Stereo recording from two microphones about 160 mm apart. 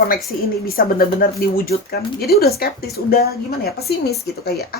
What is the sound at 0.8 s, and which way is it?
A woman's voice, 65° left (ahead or behind).